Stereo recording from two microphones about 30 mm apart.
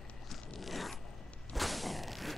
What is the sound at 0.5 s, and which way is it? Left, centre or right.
Zipper, centre.